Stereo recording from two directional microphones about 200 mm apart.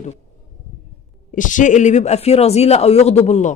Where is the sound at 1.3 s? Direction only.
40° left (ahead or behind).